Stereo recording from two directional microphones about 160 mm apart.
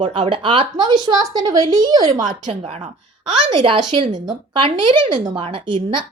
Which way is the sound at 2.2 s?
50° right (ahead or behind).